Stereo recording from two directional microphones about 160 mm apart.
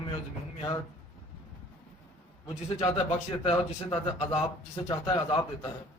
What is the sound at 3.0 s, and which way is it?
Speech, 35° left (ahead or behind).